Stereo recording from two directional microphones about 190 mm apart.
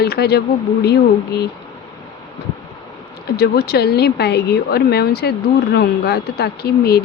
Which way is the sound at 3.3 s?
55° left (ahead or behind).